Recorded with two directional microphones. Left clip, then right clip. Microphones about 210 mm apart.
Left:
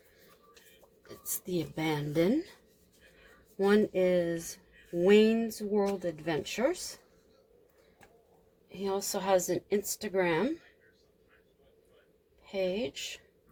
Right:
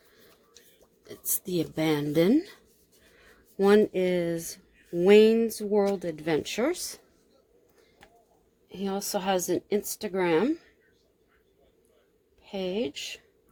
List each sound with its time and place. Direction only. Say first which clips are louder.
1.0 s speech: right 5 dB; 45° right (ahead or behind)
3.6 s speech: right 5 dB; 50° right (ahead or behind)
8.7 s speech: right 2 dB; 45° right (ahead or behind)
12.5 s speech: right 1 dB; 45° right (ahead or behind)